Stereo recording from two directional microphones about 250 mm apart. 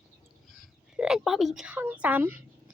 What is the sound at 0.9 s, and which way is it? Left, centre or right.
A woman's voice, centre.